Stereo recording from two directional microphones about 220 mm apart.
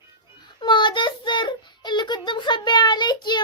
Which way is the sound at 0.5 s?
20° left (ahead or behind).